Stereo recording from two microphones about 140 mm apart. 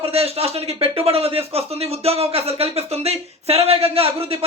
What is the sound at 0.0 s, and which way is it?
Speech, 45° right (ahead or behind).